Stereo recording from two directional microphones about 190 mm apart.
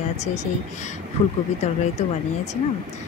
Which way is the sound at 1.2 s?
30° left (ahead or behind).